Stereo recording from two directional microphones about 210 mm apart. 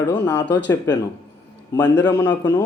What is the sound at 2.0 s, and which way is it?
Speech, 10° left (ahead or behind).